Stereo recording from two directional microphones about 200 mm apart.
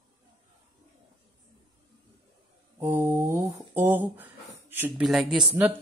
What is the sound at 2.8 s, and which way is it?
Speech, 10° right (ahead or behind).